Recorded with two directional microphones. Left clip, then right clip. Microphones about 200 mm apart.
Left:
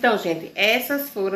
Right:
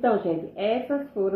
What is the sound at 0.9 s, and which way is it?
Speech, 25° left (ahead or behind).